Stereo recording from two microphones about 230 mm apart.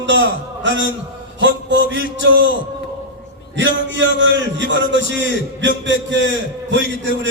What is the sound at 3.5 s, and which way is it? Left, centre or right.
A man's voice, right.